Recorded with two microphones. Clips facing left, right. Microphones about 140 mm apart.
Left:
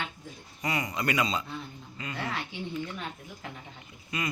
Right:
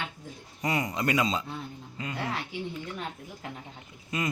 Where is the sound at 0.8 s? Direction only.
30° right (ahead or behind).